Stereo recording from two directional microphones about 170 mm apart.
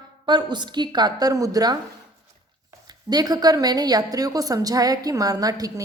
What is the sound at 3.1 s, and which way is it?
A woman's voice, 20° right (ahead or behind).